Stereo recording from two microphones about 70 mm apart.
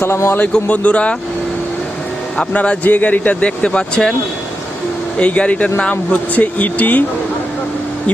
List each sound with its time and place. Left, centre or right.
0.0 s a man's voice: left
0.5 s speech: left
2.4 s speech: centre
5.1 s speech: centre